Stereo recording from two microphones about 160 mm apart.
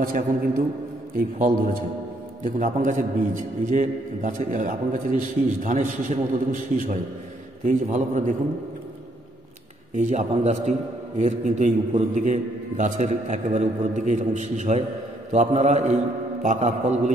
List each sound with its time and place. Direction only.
0.0 s a man's voice: 65° right (ahead or behind)
9.9 s a man's voice: 50° right (ahead or behind)